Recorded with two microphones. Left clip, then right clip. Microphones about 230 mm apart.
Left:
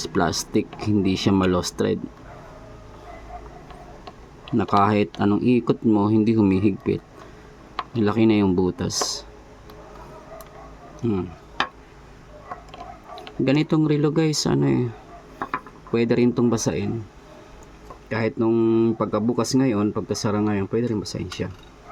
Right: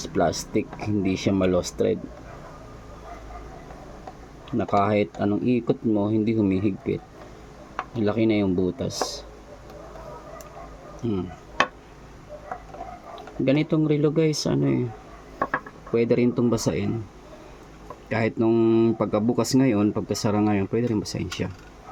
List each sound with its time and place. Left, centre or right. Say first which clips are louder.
0.1 s speech: even; left
4.4 s speech: left 3 dB; left
11.0 s speech: left 3 dB; centre
13.4 s speech: left 2 dB; left
15.9 s speech: left 1 dB; centre
18.1 s speech: even; centre